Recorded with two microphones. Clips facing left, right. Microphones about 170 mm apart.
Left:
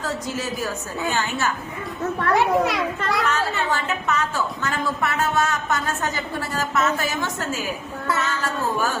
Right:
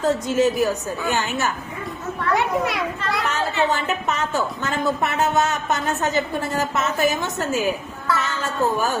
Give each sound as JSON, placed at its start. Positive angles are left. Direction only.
{"t": 0.0, "sound": "a woman's voice", "side_deg": -20}
{"t": 2.3, "sound": "a child's voice", "side_deg": 0}
{"t": 3.2, "sound": "a woman's voice", "side_deg": -20}